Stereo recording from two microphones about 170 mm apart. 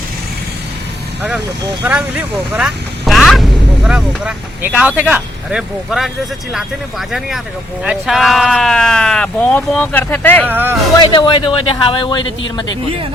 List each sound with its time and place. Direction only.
1.8 s speech: 10° right (ahead or behind)
7.1 s speech: centre (ahead or behind)
10.5 s speech: 10° right (ahead or behind)
11.0 s a man's voice: 25° left (ahead or behind)